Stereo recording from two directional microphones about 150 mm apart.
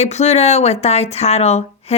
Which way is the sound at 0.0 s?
45° left (ahead or behind).